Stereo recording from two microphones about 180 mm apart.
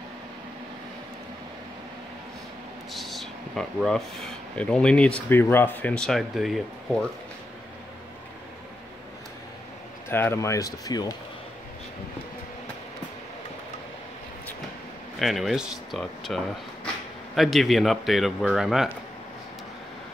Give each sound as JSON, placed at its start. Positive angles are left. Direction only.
{"t": 2.9, "sound": "speech", "side_deg": 0}
{"t": 10.0, "sound": "speech", "side_deg": 15}
{"t": 15.1, "sound": "speech", "side_deg": 0}